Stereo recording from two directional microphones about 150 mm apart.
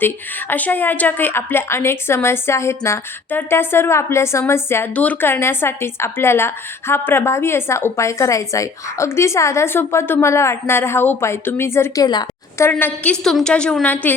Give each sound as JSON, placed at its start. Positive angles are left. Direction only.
{"t": 0.0, "sound": "a woman's voice", "side_deg": 15}
{"t": 12.0, "sound": "a sound", "side_deg": 25}
{"t": 12.7, "sound": "a woman's voice", "side_deg": 10}